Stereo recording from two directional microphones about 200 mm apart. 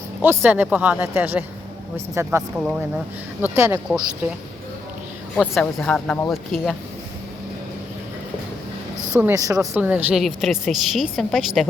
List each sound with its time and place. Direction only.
0.2 s speech: 10° right (ahead or behind)
3.6 s speech: 10° right (ahead or behind)
5.4 s a woman's voice: 5° left (ahead or behind)
9.1 s a woman's voice: 15° right (ahead or behind)